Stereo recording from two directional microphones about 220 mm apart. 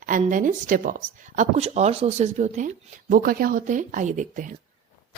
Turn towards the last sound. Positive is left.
turn(degrees=-35)  # may be behind; listen again after turning